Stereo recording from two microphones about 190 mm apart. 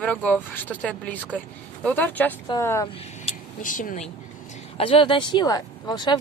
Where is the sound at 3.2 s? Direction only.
45° left (ahead or behind).